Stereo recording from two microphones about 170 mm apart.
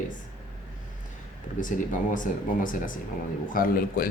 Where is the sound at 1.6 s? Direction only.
50° left (ahead or behind).